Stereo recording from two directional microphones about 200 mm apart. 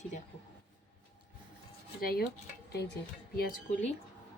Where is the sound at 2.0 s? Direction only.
50° left (ahead or behind).